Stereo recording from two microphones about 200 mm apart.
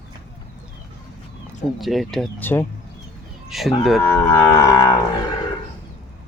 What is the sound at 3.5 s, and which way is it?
Speech, centre (ahead or behind).